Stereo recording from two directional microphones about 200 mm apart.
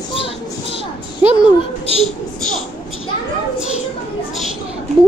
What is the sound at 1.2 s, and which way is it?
Speech, 10° right (ahead or behind).